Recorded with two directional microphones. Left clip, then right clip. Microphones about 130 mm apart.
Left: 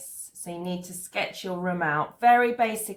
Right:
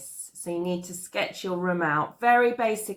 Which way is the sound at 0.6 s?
20° left (ahead or behind).